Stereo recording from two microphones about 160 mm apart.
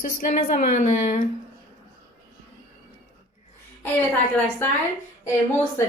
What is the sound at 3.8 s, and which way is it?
Speech, 10° left (ahead or behind).